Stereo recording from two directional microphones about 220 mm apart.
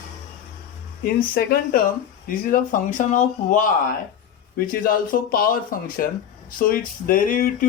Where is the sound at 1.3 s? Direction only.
45° left (ahead or behind).